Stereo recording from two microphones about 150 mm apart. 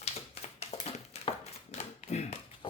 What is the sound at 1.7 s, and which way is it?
Tap, 45° left (ahead or behind).